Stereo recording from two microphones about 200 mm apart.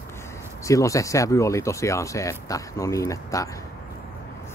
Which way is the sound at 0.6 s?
15° left (ahead or behind).